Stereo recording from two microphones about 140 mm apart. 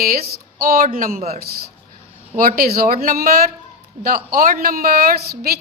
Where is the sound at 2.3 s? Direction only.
80° right.